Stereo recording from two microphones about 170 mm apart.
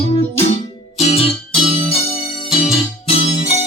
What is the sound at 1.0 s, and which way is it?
Music, 35° left (ahead or behind).